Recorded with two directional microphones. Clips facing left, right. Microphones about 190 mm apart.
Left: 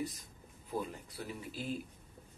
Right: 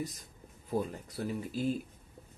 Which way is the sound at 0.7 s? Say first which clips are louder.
Right 5 dB; 45° right (ahead or behind).